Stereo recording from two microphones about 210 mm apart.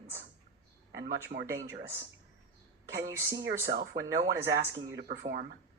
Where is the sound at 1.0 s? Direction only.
50° right (ahead or behind).